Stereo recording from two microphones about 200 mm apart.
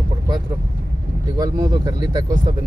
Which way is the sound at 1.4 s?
20° right (ahead or behind).